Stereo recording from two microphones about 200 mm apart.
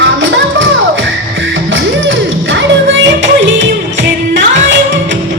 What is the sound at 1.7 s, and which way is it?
Music, 65° right (ahead or behind).